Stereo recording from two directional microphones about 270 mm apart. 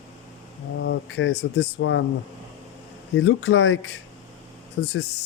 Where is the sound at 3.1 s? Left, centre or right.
Left.